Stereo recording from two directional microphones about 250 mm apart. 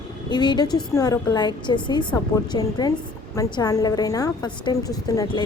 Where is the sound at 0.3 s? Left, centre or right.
Centre.